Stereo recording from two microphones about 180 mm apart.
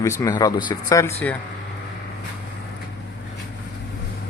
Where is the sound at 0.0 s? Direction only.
15° left (ahead or behind).